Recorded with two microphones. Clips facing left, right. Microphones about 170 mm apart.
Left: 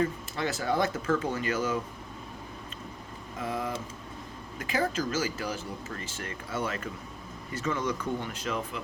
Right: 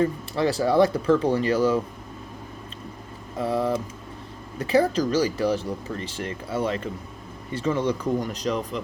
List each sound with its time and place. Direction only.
0.0 s speech: 35° right (ahead or behind)
3.3 s speech: 35° right (ahead or behind)